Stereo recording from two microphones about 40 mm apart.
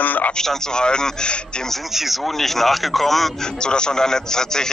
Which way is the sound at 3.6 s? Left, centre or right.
Left.